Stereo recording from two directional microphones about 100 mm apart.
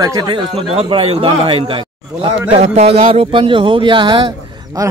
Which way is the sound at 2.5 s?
90° right.